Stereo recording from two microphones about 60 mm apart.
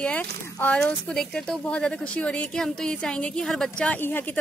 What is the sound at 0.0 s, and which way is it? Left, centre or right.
Speech, left.